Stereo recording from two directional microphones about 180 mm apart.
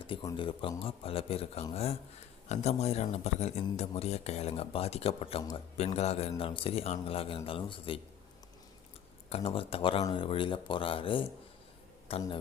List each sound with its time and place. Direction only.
0.1 s speech: 25° left (ahead or behind)
9.3 s speech: 30° left (ahead or behind)